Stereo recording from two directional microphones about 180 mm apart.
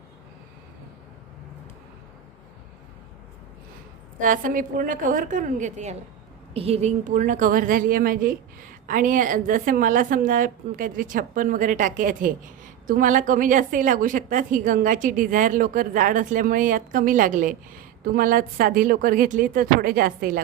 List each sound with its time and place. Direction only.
4.2 s a woman's voice: 50° right (ahead or behind)